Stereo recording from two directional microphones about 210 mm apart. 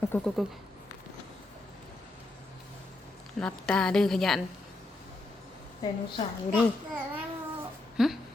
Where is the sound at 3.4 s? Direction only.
5° left (ahead or behind).